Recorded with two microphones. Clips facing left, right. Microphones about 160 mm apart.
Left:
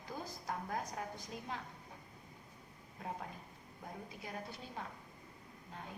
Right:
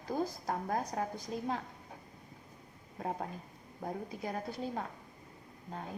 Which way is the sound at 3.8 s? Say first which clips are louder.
Right 9 dB; 45° right (ahead or behind).